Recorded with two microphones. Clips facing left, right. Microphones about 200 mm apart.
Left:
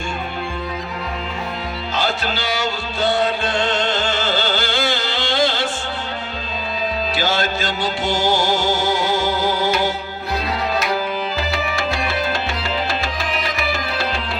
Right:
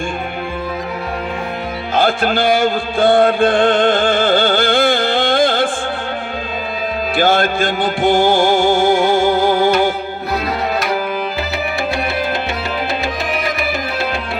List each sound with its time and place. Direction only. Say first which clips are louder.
2.0 s music: right 9 dB; 55° right (ahead or behind)
7.2 s music: right 9 dB; 55° right (ahead or behind)